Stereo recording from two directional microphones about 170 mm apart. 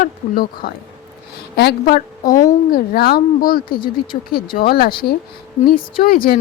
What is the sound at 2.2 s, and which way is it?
Speech, 20° left (ahead or behind).